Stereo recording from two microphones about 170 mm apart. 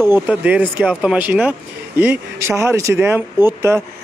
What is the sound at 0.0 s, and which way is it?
A man's voice, 10° right (ahead or behind).